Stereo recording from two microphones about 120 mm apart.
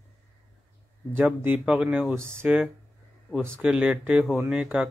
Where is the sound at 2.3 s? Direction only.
15° right (ahead or behind).